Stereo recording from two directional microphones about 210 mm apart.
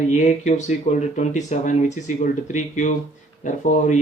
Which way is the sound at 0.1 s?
35° left (ahead or behind).